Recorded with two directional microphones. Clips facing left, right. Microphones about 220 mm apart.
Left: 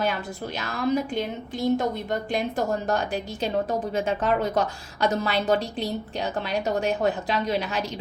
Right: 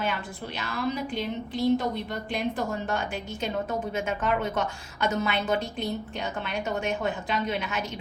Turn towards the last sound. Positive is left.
turn(degrees=35)  # may be behind; listen again after turning